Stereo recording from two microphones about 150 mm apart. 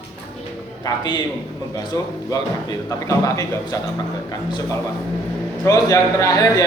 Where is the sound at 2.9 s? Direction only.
20° left (ahead or behind).